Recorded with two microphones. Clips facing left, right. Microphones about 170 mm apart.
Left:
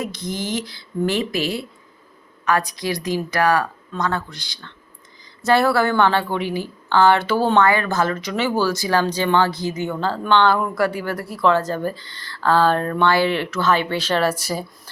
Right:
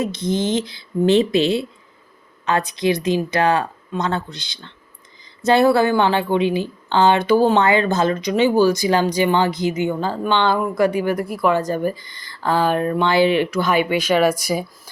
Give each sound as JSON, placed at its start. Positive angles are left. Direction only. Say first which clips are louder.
{"t": 0.0, "sound": "a woman's voice", "louder": "right 6 dB", "side_deg": -20}